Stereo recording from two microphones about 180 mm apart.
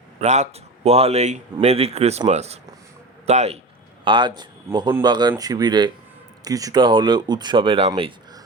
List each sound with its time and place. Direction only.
0.2 s speech: 40° right (ahead or behind)
4.0 s a man's voice: 25° right (ahead or behind)